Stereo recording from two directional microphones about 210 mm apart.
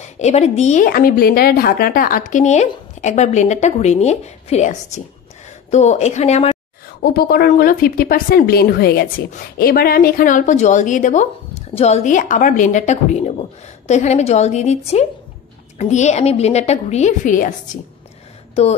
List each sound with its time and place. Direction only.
0.0 s a woman's voice: 30° left (ahead or behind)
7.0 s a woman's voice: 45° left (ahead or behind)